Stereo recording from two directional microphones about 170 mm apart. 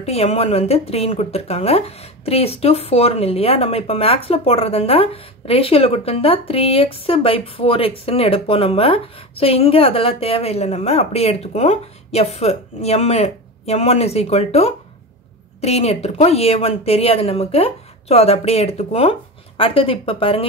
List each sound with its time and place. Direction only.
0.0 s a woman's voice: 40° left (ahead or behind)